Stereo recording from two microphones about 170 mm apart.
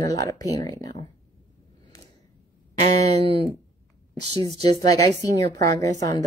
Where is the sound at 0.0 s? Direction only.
20° left (ahead or behind).